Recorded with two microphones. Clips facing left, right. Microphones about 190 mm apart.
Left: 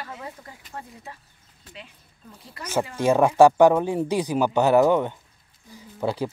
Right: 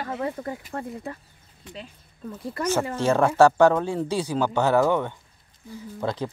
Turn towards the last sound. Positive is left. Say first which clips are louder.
# left 2 dB
turn(degrees=10)  # may be behind; listen again after turning